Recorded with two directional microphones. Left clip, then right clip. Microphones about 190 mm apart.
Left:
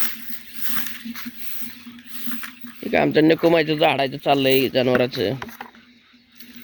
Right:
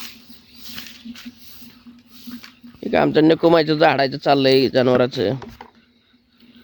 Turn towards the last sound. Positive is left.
turn(degrees=0)  # may be behind; listen again after turning